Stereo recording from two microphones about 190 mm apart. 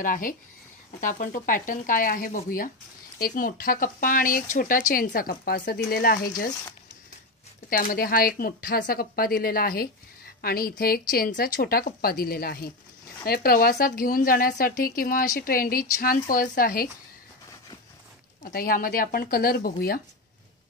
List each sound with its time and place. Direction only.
0.0 s speech: 45° left (ahead or behind)
7.7 s speech: 50° left (ahead or behind)
18.4 s speech: 50° left (ahead or behind)